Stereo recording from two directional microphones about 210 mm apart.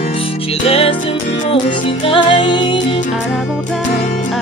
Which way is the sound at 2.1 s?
25° left (ahead or behind).